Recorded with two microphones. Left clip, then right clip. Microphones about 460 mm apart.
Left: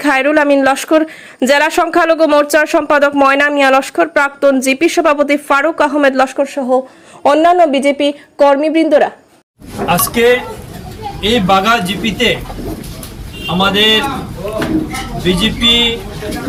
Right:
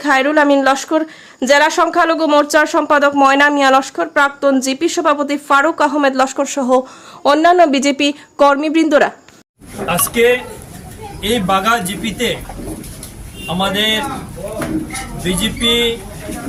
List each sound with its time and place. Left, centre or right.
0.0 s a woman's voice: centre
9.8 s a man's voice: right
13.5 s a man's voice: right
15.2 s a man's voice: right